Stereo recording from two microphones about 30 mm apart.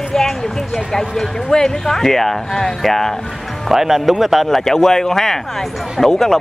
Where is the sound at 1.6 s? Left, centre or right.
Centre.